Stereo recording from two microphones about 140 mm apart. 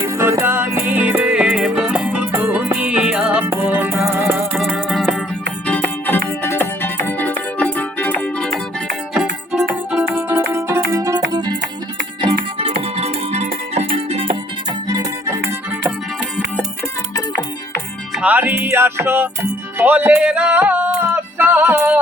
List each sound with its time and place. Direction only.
0.0 s music: 20° right (ahead or behind)
5.6 s music: 10° left (ahead or behind)
9.1 s music: 5° right (ahead or behind); by 11.5 s 30° right (ahead or behind)
13.0 s music: 50° right (ahead or behind)
14.8 s music: 25° right (ahead or behind)
18.2 s music: 10° right (ahead or behind)